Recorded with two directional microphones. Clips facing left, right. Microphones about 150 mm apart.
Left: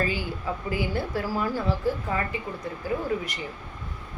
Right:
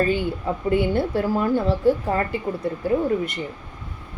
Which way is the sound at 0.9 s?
25° right (ahead or behind).